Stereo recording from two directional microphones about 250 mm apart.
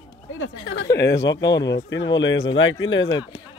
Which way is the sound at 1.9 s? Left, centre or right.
Left.